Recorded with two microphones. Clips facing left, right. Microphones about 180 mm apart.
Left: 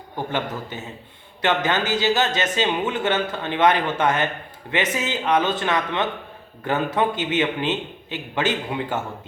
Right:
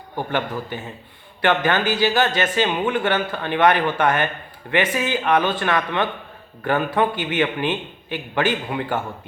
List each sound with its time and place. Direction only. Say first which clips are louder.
0.3 s speech: right 3 dB; 20° left (ahead or behind)